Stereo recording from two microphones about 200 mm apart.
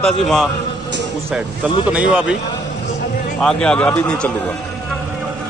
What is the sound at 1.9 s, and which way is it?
Speech, 5° right (ahead or behind).